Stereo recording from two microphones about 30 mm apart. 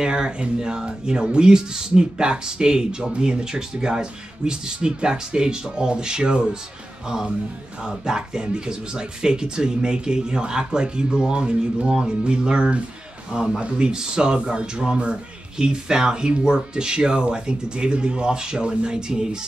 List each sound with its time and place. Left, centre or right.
0.0 s speech: right
7.8 s speech: right
13.9 s speech: right